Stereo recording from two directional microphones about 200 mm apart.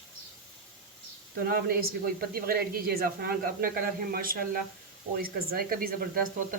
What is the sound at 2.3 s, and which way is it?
Speech, 50° right (ahead or behind).